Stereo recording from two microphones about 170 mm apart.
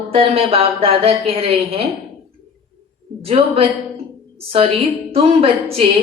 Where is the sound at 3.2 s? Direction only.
35° right (ahead or behind).